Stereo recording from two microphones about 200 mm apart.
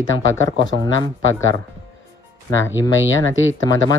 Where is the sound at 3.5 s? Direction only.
15° left (ahead or behind).